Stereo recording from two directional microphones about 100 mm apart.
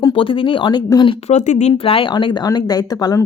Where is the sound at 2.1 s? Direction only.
50° left (ahead or behind).